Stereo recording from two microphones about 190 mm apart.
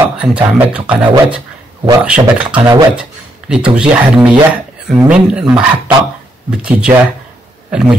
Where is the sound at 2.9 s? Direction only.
5° right (ahead or behind).